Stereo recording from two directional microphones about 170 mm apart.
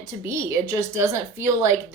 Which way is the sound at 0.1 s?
15° right (ahead or behind).